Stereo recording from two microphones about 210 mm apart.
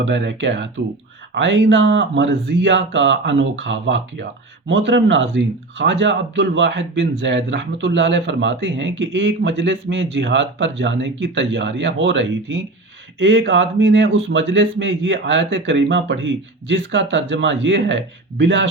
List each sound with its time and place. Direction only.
0.0 s a man's voice: 60° right (ahead or behind)